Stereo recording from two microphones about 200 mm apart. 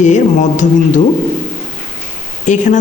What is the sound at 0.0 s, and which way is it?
Speech, 35° left (ahead or behind).